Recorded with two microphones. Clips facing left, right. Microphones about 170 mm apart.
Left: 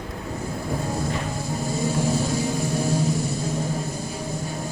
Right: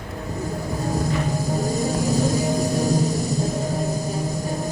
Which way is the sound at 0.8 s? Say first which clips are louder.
Right 7 dB; 40° right (ahead or behind).